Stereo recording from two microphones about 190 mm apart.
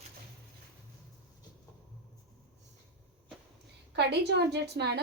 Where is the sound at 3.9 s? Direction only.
65° right (ahead or behind).